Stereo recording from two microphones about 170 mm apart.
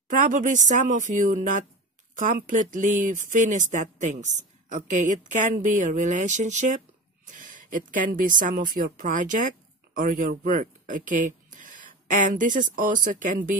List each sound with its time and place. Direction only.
0.1 s speech: 50° right (ahead or behind)